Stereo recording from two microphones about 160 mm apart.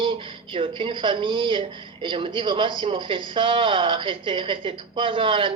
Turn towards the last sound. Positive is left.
turn(degrees=-35)  # may be behind; listen again after turning